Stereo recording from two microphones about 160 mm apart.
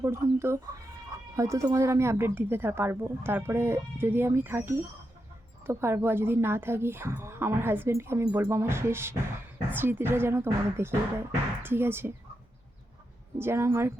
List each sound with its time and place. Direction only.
0.0 s a woman's voice: 15° right (ahead or behind)
13.4 s a woman's voice: 15° right (ahead or behind)